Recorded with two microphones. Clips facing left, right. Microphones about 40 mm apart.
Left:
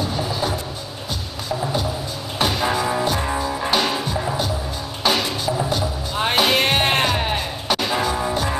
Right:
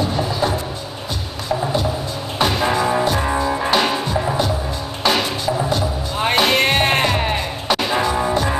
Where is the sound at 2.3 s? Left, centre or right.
Centre.